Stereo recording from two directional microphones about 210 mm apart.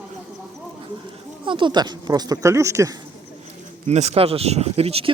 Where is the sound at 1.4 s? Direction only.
25° right (ahead or behind).